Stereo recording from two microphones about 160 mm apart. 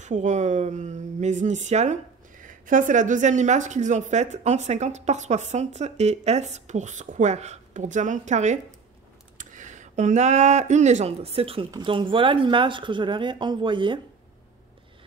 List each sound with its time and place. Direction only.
0.0 s speech: 50° right (ahead or behind); by 13.9 s 30° right (ahead or behind)